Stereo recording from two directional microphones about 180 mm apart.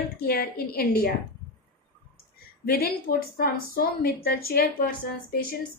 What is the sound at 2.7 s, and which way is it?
A woman's voice, 55° left (ahead or behind).